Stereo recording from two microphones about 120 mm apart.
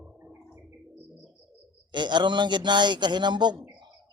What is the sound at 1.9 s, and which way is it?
A man's voice, 40° right (ahead or behind).